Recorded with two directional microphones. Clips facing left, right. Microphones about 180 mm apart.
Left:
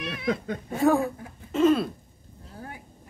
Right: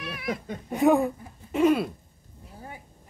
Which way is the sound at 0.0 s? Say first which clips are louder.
Left 3 dB; 25° left (ahead or behind).